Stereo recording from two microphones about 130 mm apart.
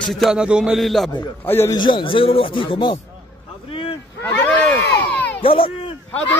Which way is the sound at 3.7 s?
45° left (ahead or behind).